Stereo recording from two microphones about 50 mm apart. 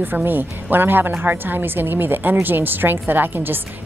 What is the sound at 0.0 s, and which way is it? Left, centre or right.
A woman's voice, right.